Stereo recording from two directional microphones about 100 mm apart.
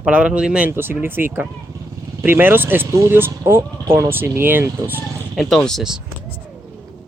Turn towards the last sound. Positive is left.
turn(degrees=5)  # may be behind; listen again after turning